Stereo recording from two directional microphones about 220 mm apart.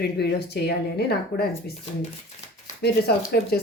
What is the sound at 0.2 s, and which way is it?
Speech, 45° left (ahead or behind).